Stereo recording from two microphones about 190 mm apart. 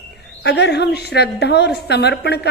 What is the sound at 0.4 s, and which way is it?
A woman's voice, 60° left (ahead or behind).